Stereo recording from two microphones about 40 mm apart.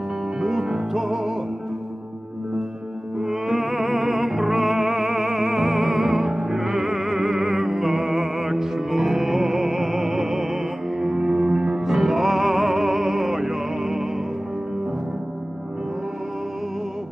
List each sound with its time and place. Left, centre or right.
0.4 s music: centre
3.2 s music: centre
11.8 s music: centre